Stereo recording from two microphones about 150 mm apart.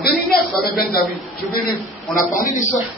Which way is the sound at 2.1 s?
65° left (ahead or behind).